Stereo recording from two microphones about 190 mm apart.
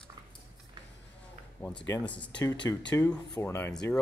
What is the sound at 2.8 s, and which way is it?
Speech, 10° left (ahead or behind).